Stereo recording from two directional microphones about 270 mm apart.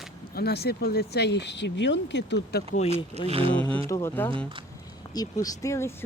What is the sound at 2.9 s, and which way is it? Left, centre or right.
Speech, right.